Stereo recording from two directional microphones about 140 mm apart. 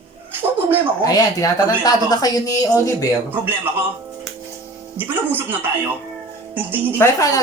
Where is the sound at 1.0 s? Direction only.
25° left (ahead or behind).